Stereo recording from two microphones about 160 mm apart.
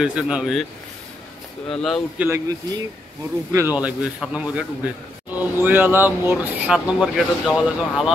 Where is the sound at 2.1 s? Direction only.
15° right (ahead or behind).